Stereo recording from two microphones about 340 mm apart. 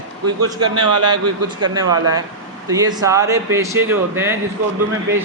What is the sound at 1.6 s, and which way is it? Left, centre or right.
Speech, centre.